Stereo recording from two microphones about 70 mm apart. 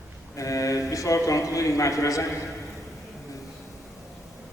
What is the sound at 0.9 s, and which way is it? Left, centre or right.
A man's voice, left.